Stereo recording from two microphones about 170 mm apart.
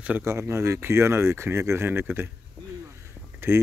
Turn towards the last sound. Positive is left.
turn(degrees=-15)  # may be behind; listen again after turning